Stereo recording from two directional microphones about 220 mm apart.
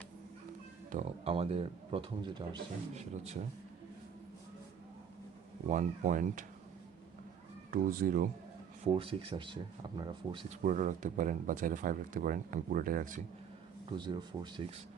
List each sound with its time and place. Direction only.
0.9 s speech: 30° right (ahead or behind)
5.6 s speech: 35° right (ahead or behind)
7.7 s speech: 40° right (ahead or behind)
8.8 s speech: 25° right (ahead or behind)
10.6 s speech: 35° right (ahead or behind)
13.9 s speech: 20° right (ahead or behind)